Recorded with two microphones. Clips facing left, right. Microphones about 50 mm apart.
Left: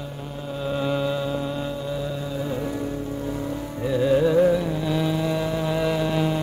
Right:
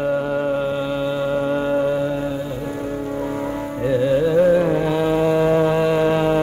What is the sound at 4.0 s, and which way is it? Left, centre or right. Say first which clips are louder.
Carnatic music: even; centre.